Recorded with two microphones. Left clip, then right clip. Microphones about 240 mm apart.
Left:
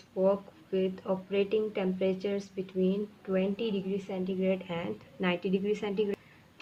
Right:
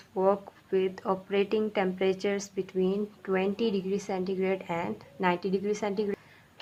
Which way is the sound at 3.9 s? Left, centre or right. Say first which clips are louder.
Right 4 dB; right.